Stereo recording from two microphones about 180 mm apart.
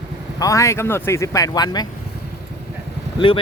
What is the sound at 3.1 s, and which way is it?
Speech, 30° left (ahead or behind).